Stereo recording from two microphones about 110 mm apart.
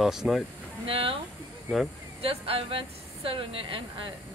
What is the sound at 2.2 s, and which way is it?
A woman's voice, 60° right (ahead or behind).